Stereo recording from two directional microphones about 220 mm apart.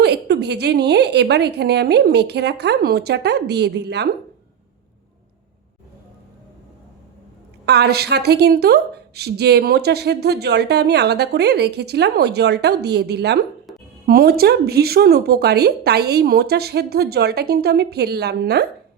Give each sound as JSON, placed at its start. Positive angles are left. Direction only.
{"t": 0.0, "sound": "a woman's voice", "side_deg": -50}
{"t": 7.6, "sound": "a woman's voice", "side_deg": -50}